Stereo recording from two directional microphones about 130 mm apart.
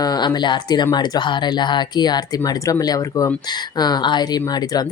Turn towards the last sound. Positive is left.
turn(degrees=30)  # may be behind; listen again after turning